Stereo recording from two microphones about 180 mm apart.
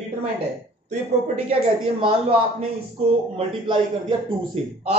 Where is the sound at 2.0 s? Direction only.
30° right (ahead or behind).